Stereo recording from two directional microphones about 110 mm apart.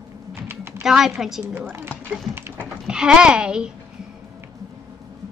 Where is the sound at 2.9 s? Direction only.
5° right (ahead or behind).